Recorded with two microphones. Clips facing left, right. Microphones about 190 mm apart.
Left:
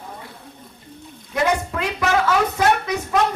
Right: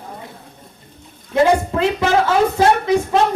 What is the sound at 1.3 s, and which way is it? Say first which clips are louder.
Speech: right 6 dB; 25° right (ahead or behind).